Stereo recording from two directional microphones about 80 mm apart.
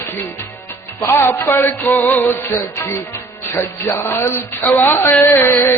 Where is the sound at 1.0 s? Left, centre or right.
Left.